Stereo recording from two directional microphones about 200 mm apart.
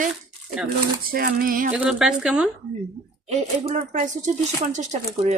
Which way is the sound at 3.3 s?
35° right (ahead or behind).